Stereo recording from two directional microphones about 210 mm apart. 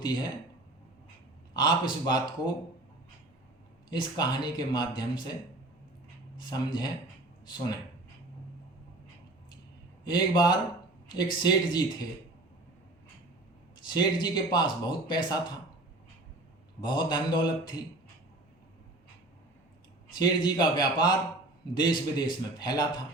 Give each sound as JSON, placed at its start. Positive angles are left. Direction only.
{"t": 0.0, "sound": "speech", "side_deg": 20}
{"t": 1.5, "sound": "speech", "side_deg": 20}
{"t": 3.8, "sound": "speech", "side_deg": 20}
{"t": 6.5, "sound": "speech", "side_deg": 20}
{"t": 10.0, "sound": "speech", "side_deg": 20}
{"t": 13.9, "sound": "speech", "side_deg": 20}
{"t": 16.8, "sound": "speech", "side_deg": 20}
{"t": 20.1, "sound": "speech", "side_deg": 20}